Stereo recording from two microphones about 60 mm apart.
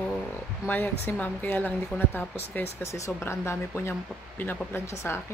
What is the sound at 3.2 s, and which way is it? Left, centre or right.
Speech, left.